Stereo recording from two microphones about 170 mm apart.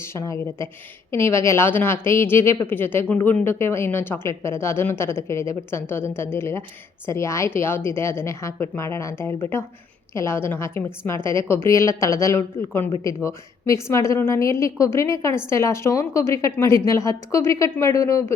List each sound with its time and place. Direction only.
0.0 s a woman's voice: 15° left (ahead or behind)